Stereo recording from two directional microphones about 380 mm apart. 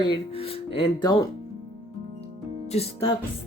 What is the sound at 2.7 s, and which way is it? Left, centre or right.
Speech, centre.